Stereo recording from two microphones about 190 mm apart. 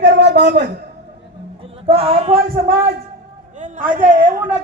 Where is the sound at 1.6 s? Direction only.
30° right (ahead or behind).